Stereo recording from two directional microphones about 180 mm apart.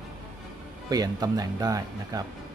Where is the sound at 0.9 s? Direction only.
20° right (ahead or behind).